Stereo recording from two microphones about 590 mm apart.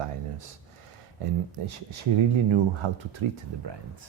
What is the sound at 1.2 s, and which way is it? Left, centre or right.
Speech, right.